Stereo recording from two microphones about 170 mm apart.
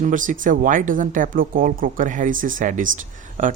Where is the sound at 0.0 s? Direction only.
50° right (ahead or behind).